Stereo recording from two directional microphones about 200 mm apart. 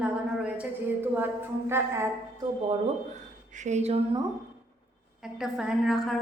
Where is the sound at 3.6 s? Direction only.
35° right (ahead or behind).